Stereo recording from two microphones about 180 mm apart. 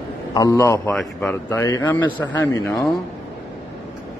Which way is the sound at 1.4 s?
20° left (ahead or behind).